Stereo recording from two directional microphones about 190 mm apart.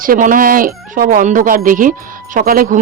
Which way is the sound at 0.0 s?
45° right (ahead or behind).